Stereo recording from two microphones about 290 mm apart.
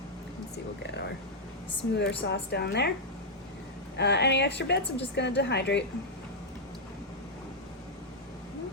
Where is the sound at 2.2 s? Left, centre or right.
Left.